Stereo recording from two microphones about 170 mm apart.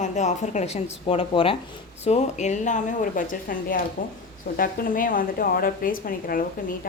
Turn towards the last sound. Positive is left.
turn(degrees=55)  # may be behind; listen again after turning